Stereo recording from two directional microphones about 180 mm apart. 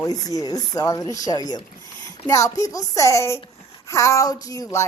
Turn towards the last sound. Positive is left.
turn(degrees=15)  # may be behind; listen again after turning